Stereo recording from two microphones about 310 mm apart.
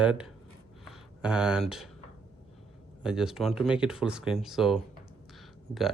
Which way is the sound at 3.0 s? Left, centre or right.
Centre.